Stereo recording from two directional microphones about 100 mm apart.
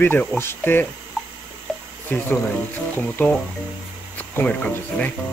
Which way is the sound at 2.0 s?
15° left (ahead or behind).